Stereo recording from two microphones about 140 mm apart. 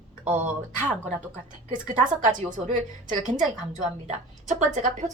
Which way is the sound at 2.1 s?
60° right (ahead or behind).